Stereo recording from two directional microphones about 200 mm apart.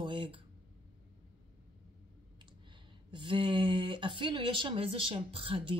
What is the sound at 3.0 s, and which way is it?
Speech, 25° right (ahead or behind).